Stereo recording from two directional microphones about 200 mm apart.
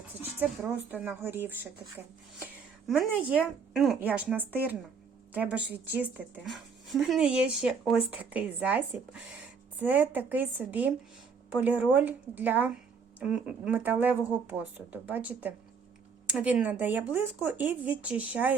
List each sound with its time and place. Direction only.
0.2 s speech: 10° right (ahead or behind)
2.8 s a woman's voice: centre (ahead or behind)